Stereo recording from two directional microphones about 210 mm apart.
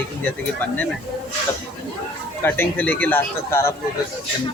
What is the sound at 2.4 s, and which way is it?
Speech, 10° left (ahead or behind).